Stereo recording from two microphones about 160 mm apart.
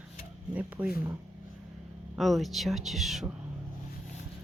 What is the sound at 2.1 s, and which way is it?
Speech, centre (ahead or behind).